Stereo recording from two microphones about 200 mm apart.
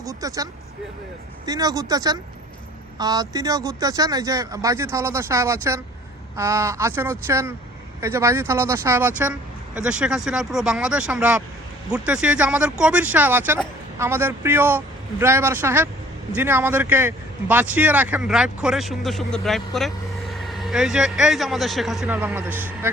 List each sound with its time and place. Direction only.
0.0 s speech: 15° right (ahead or behind)
1.5 s speech: 20° right (ahead or behind)